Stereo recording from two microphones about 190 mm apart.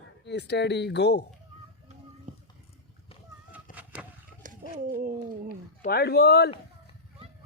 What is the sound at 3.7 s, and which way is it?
Vehicle, 5° right (ahead or behind).